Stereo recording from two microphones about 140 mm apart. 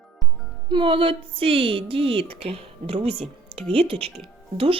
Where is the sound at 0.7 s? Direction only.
40° right (ahead or behind).